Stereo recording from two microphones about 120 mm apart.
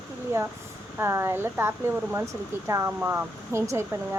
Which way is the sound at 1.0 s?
20° right (ahead or behind).